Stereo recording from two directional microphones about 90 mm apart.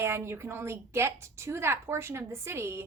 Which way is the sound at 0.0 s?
30° right (ahead or behind).